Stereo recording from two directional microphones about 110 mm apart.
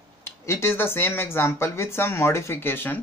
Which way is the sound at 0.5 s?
20° left (ahead or behind).